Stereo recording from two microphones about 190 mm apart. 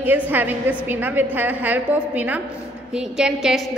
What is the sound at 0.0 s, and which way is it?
A woman's voice, 10° right (ahead or behind).